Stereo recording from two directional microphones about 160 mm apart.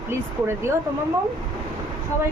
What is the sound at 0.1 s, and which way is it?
Speech, 15° right (ahead or behind).